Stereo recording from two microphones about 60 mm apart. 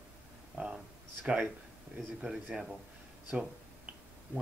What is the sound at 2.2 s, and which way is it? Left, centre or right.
Speech, centre.